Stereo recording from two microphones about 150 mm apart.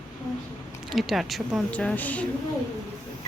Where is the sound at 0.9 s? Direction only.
Centre (ahead or behind).